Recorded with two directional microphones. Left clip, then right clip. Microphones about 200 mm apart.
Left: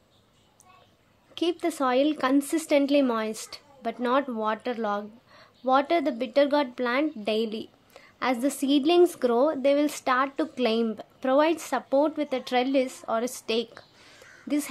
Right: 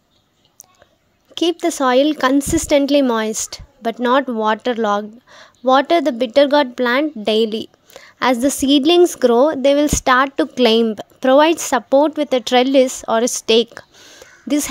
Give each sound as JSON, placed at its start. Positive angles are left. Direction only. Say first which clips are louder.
{"t": 1.3, "sound": "a woman's voice", "louder": "right 10 dB", "side_deg": -35}